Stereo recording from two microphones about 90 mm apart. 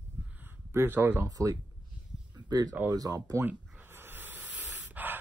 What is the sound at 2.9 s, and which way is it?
Speech, 45° right (ahead or behind).